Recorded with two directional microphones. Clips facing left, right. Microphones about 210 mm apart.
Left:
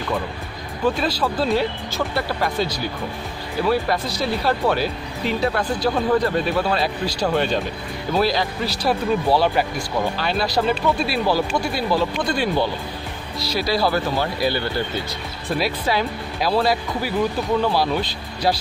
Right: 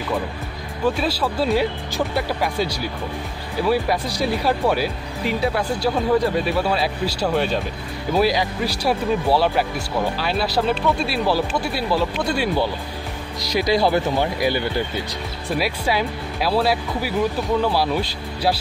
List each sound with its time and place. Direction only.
0.8 s speech: 5° right (ahead or behind)
13.5 s speech: 20° right (ahead or behind)